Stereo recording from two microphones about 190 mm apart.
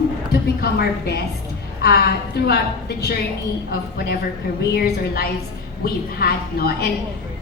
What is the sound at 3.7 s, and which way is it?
A woman's voice, 60° left (ahead or behind).